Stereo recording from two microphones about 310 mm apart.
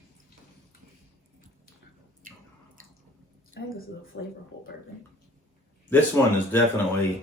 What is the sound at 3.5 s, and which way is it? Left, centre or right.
Speech, left.